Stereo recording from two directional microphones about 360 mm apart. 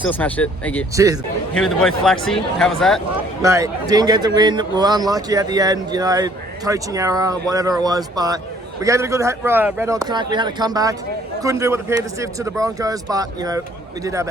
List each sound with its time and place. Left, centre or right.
0.0 s speech: centre
0.9 s a man's voice: centre
1.5 s speech: centre
3.4 s a man's voice: centre